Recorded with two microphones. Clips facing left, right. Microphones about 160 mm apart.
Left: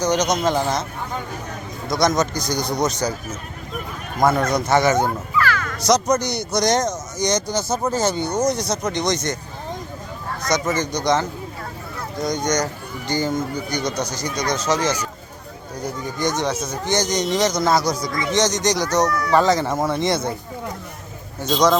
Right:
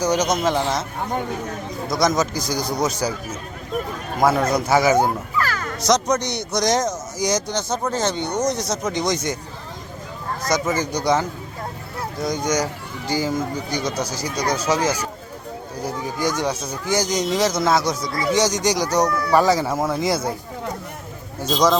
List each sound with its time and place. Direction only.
0.0 s a man's voice: 10° right (ahead or behind)
1.9 s a man's voice: centre (ahead or behind)
4.2 s speech: 5° right (ahead or behind)
5.4 s music: 40° right (ahead or behind)
5.8 s a man's voice: centre (ahead or behind)
10.8 s a man's voice: 10° right (ahead or behind)
21.5 s a man's voice: centre (ahead or behind)